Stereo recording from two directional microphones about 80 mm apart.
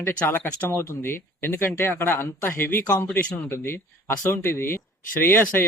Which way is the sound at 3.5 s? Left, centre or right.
Left.